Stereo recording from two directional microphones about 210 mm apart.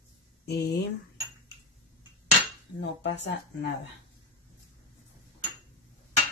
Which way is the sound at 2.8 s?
55° left (ahead or behind).